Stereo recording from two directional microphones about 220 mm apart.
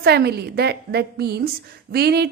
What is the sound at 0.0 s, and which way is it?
A woman's voice, 50° right (ahead or behind).